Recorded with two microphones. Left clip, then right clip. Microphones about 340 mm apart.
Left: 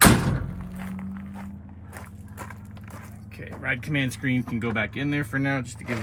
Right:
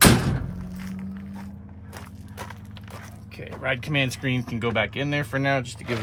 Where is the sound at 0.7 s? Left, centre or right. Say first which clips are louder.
Left 2 dB; centre.